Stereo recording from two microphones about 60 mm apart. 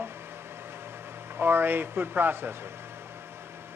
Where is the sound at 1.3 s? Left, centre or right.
Right.